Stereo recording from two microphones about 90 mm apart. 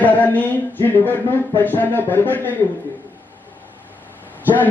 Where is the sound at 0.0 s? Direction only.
20° left (ahead or behind).